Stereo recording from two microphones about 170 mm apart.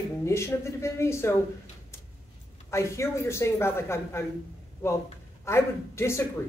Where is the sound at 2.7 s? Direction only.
15° left (ahead or behind).